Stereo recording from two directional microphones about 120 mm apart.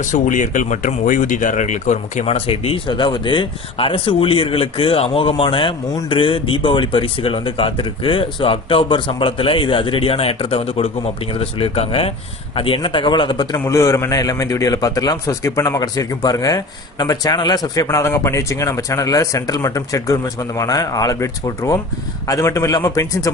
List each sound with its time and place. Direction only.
0.0 s speech: 90° left
2.2 s a man's voice: 55° left (ahead or behind); by 13.7 s 35° left (ahead or behind)
13.7 s a man's voice: 25° left (ahead or behind)